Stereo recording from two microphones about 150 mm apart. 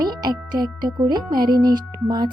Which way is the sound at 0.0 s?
30° right (ahead or behind).